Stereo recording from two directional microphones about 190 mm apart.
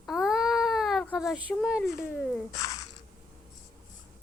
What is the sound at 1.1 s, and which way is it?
Speech, centre (ahead or behind).